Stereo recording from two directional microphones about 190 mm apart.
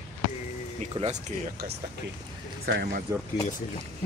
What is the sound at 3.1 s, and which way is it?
Speech, 20° right (ahead or behind).